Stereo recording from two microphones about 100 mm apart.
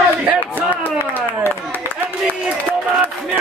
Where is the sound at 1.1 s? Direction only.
20° left (ahead or behind).